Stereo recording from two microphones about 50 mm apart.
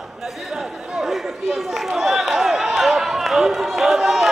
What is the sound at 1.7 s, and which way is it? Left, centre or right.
Run, centre.